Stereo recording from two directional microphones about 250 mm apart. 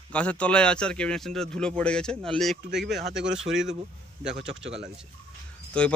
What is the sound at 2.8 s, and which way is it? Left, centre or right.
Speech, right.